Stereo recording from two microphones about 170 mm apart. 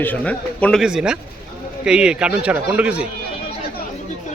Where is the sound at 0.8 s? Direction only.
5° right (ahead or behind).